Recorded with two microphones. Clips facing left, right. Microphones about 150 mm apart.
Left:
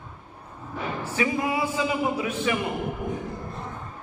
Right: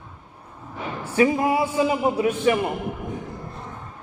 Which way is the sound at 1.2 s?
40° right (ahead or behind).